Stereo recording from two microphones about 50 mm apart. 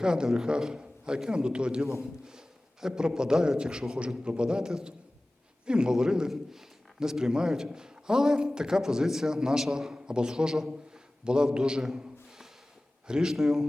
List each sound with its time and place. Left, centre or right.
0.0 s a man's voice: centre
13.1 s a man's voice: centre